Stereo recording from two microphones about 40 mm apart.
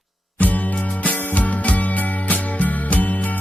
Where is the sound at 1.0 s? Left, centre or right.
Left.